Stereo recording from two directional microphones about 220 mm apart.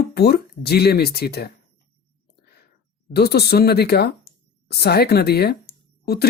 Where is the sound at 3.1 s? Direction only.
45° left (ahead or behind).